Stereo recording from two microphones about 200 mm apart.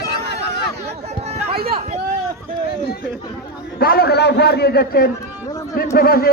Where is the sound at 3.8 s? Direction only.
50° left (ahead or behind).